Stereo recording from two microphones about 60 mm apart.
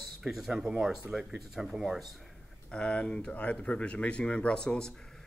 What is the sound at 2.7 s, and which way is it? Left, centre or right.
Speech, centre.